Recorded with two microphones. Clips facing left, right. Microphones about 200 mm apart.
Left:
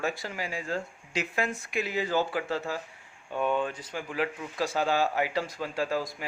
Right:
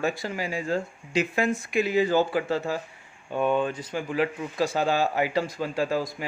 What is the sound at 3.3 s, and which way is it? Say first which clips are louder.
Speech: right 4 dB; 25° right (ahead or behind).